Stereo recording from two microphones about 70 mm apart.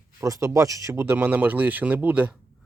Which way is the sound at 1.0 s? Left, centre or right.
Right.